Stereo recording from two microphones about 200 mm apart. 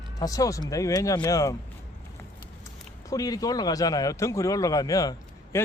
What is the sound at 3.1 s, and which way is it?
A man's voice, 20° left (ahead or behind).